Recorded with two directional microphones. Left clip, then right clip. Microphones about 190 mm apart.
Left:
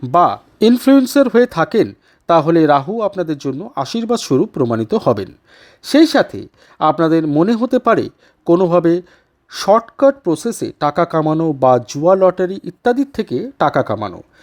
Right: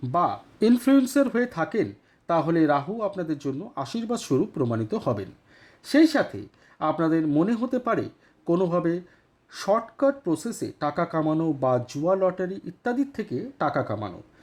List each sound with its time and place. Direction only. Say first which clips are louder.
0.0 s a man's voice: left 12 dB; 35° left (ahead or behind)